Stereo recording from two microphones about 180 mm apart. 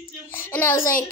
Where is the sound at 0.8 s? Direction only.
50° left (ahead or behind).